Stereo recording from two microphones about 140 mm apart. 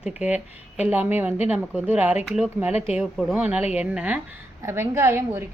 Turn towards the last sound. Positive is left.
turn(degrees=-20)  # may be behind; listen again after turning